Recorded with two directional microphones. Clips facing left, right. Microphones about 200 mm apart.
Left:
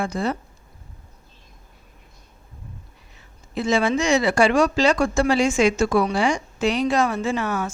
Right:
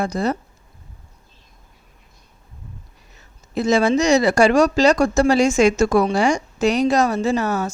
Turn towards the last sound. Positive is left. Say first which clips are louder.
# right 4 dB
turn(degrees=-40)  # may be behind; listen again after turning